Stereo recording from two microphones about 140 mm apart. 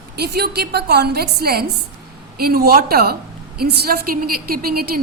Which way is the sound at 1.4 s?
90° right.